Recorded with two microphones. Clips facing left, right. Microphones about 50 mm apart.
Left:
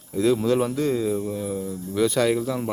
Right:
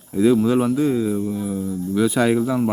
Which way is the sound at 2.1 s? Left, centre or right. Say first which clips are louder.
Right 4 dB; centre.